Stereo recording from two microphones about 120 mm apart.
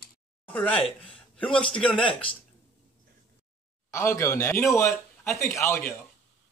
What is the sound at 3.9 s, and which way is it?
A man's voice, 25° left (ahead or behind).